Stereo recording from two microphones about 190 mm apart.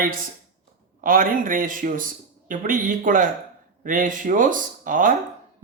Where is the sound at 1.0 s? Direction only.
45° right (ahead or behind).